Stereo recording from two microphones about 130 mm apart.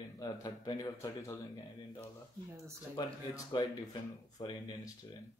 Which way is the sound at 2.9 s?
35° left (ahead or behind).